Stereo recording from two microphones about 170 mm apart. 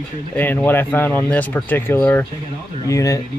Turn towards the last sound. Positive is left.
turn(degrees=20)  # may be behind; listen again after turning